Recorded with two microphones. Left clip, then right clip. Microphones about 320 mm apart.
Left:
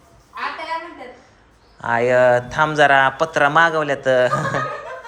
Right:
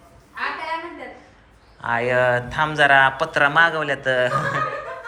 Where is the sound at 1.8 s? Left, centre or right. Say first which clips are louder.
Left 4 dB; left.